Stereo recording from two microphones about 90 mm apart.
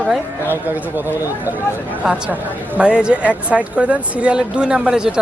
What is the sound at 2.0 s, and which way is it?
Speech, 5° right (ahead or behind).